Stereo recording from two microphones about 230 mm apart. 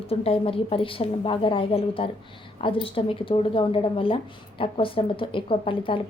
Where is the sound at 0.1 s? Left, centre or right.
Left.